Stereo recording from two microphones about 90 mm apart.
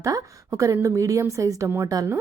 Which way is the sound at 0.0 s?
40° right (ahead or behind).